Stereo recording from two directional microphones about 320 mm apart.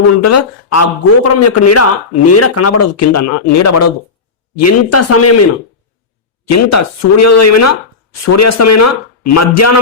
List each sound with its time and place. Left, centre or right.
0.2 s a man's voice: left
6.5 s a man's voice: left